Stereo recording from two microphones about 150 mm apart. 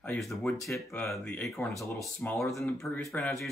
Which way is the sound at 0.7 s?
15° left (ahead or behind).